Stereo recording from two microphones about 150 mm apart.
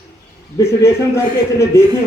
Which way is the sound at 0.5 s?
20° left (ahead or behind).